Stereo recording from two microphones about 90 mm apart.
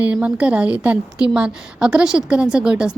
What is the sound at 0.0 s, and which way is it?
Speech, 15° right (ahead or behind).